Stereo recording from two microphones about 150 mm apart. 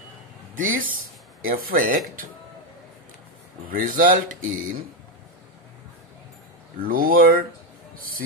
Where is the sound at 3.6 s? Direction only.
70° right (ahead or behind).